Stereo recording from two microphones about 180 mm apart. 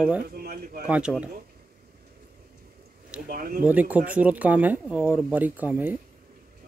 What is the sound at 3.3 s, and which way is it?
Speech, 50° right (ahead or behind).